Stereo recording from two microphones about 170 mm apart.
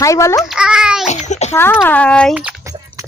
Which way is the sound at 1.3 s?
40° left (ahead or behind).